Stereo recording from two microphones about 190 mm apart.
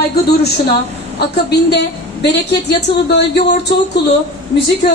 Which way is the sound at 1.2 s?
60° left (ahead or behind).